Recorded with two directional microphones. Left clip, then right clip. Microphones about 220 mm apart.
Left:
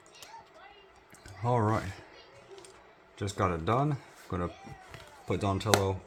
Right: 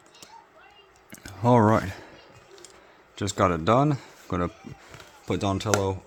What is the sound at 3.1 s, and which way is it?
Speech, 50° right (ahead or behind).